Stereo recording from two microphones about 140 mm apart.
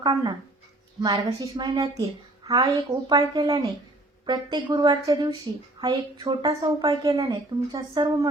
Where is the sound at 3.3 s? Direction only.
30° right (ahead or behind).